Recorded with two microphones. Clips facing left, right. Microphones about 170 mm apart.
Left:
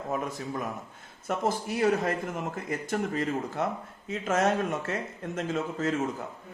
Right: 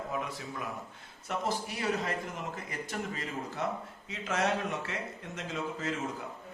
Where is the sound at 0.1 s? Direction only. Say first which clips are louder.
Left 5 dB; 45° left (ahead or behind).